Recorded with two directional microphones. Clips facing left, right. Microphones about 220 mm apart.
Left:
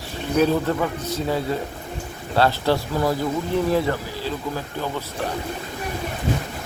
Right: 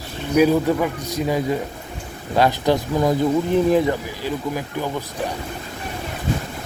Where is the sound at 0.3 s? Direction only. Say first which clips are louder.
Right 4 dB; 10° right (ahead or behind).